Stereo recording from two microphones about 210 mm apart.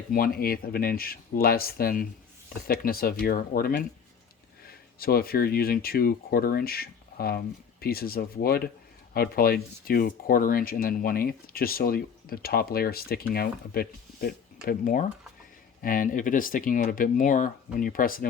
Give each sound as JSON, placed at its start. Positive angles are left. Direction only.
{"t": 0.1, "sound": "speech", "side_deg": 45}